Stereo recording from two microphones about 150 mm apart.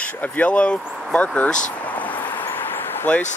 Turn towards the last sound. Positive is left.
turn(degrees=10)  # may be behind; listen again after turning